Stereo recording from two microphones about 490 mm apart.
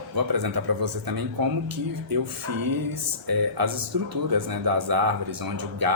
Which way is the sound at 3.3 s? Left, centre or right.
Right.